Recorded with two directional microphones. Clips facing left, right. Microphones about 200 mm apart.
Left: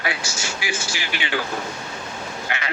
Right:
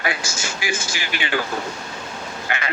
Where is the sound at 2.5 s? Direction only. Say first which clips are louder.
Right 3 dB; 50° right (ahead or behind).